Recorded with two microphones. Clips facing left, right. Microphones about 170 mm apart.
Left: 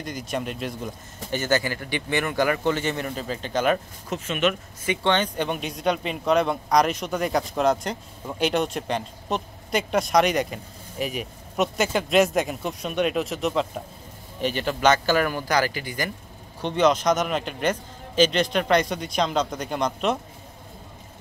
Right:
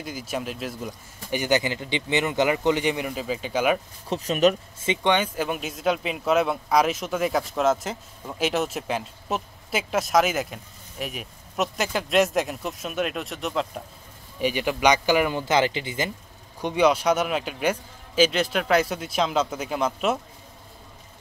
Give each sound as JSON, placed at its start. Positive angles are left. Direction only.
{"t": 0.0, "sound": "speech", "side_deg": -5}
{"t": 1.3, "sound": "speech", "side_deg": -15}
{"t": 4.1, "sound": "speech", "side_deg": -35}
{"t": 4.8, "sound": "speech", "side_deg": -15}
{"t": 14.4, "sound": "speech", "side_deg": -10}
{"t": 16.6, "sound": "speech", "side_deg": -10}